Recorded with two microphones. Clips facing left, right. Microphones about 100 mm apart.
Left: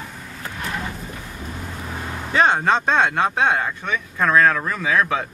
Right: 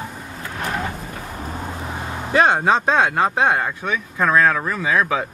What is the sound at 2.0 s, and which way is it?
Vehicle, 20° right (ahead or behind).